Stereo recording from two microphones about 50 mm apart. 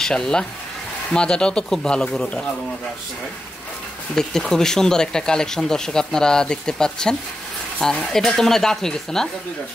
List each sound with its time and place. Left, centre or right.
0.0 s speech: centre
4.1 s speech: centre